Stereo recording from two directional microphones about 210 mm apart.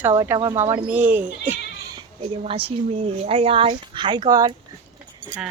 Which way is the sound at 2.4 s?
25° right (ahead or behind).